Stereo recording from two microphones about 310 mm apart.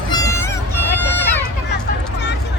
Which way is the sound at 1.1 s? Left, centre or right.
Centre.